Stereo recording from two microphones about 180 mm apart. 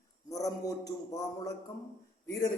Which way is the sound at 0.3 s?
20° left (ahead or behind).